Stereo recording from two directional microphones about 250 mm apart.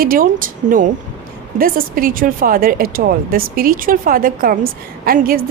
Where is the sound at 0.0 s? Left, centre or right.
Right.